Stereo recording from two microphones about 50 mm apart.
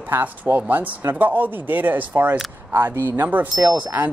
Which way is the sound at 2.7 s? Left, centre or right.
Right.